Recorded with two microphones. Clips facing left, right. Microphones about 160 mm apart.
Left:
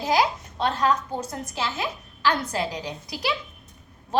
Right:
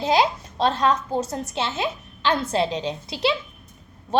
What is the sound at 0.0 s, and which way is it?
A woman's voice, 25° right (ahead or behind).